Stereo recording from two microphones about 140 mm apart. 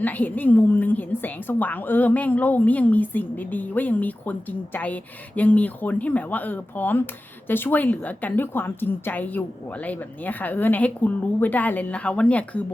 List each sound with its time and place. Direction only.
0.0 s a woman's voice: 10° left (ahead or behind)